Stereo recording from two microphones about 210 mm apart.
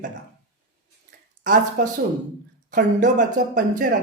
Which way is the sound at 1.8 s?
40° right (ahead or behind).